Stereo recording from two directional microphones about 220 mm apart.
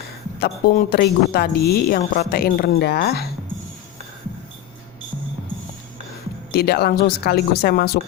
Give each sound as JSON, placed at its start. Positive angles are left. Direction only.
{"t": 0.3, "sound": "a woman's voice", "side_deg": 45}
{"t": 6.5, "sound": "a woman's voice", "side_deg": 45}